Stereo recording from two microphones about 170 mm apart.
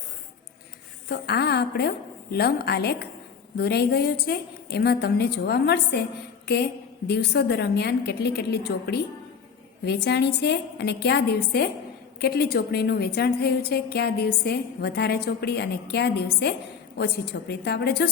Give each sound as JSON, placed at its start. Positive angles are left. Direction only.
{"t": 1.0, "sound": "a woman's voice", "side_deg": 65}
{"t": 6.4, "sound": "a sound", "side_deg": 75}
{"t": 7.1, "sound": "a woman's voice", "side_deg": 75}